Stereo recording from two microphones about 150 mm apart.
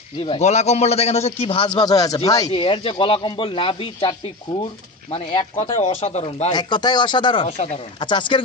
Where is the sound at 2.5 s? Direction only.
35° left (ahead or behind).